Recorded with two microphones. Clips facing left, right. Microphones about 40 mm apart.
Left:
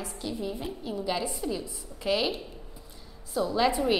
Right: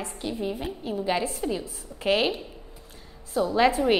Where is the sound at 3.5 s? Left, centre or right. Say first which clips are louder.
Right 4 dB; right.